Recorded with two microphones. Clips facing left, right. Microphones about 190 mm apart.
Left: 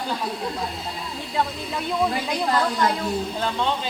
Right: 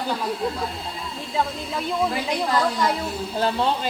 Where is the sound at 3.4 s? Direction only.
35° right (ahead or behind).